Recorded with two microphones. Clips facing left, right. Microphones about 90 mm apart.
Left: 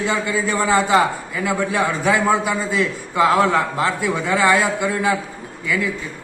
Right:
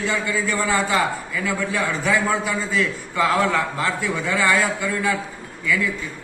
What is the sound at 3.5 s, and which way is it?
A man's voice, 20° left (ahead or behind).